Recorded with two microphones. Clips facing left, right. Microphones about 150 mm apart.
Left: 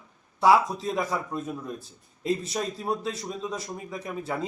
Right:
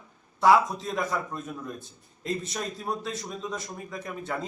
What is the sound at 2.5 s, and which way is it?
Speech, 5° left (ahead or behind).